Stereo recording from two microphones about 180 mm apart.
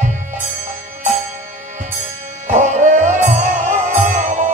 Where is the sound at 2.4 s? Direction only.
40° right (ahead or behind).